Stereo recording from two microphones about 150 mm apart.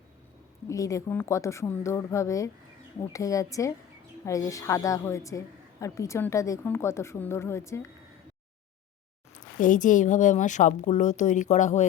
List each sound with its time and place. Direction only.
0.7 s a woman's voice: 20° left (ahead or behind)
9.6 s a woman's voice: 60° left (ahead or behind)